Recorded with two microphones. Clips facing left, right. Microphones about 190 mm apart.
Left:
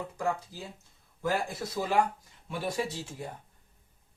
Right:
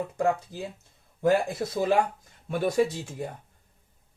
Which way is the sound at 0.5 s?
55° right (ahead or behind).